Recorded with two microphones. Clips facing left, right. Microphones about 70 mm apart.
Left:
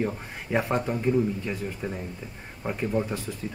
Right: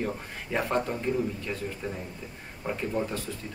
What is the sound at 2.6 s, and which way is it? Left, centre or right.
Speech, centre.